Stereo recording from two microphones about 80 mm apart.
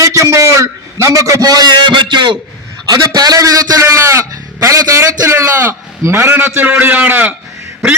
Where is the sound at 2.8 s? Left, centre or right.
Right.